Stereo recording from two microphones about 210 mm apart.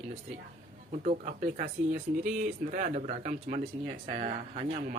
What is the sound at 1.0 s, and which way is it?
Speech, 35° right (ahead or behind).